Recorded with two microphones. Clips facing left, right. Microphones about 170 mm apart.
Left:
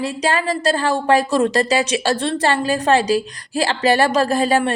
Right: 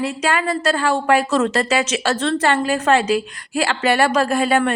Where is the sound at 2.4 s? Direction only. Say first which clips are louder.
Even; 35° left (ahead or behind).